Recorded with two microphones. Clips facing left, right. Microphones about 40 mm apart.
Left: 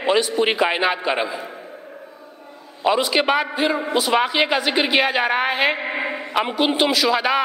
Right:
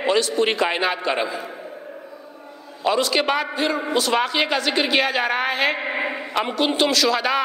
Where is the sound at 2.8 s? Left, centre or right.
Centre.